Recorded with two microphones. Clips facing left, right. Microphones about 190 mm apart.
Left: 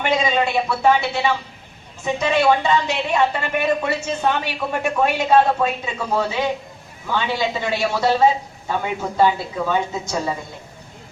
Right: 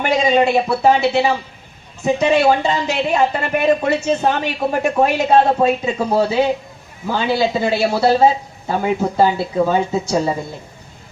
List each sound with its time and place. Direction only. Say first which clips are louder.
0.3 s speech: right 6 dB; 40° right (ahead or behind)